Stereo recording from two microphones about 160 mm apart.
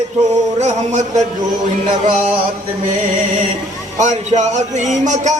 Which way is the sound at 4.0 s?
45° right (ahead or behind).